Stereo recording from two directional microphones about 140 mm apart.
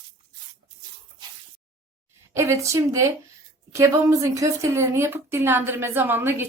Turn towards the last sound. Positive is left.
turn(degrees=-15)  # may be behind; listen again after turning